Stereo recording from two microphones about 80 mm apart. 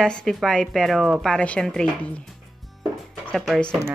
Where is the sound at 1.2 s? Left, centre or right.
Centre.